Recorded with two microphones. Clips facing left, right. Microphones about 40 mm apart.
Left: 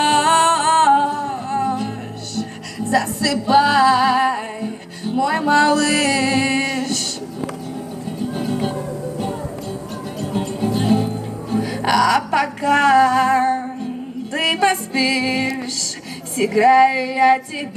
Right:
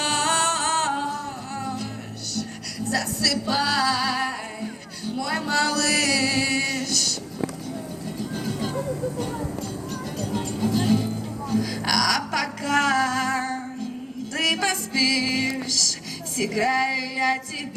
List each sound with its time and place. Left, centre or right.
0.0 s music: left
8.2 s music: left
16.4 s a sound: left